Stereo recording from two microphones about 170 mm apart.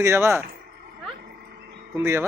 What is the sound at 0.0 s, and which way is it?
Speech, 15° right (ahead or behind).